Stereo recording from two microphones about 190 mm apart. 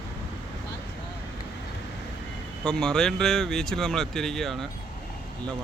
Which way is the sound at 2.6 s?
5° left (ahead or behind).